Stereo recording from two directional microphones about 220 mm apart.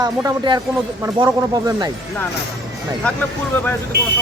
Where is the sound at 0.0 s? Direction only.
15° right (ahead or behind).